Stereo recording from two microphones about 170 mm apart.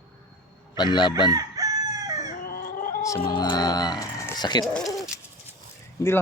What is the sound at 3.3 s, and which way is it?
Speech, 25° left (ahead or behind).